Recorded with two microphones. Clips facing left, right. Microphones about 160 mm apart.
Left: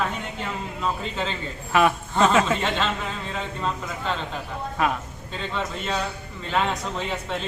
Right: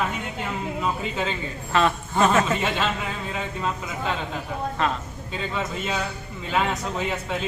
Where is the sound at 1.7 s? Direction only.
10° left (ahead or behind).